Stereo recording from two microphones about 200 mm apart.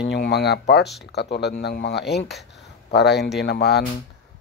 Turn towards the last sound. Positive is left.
turn(degrees=50)  # may be behind; listen again after turning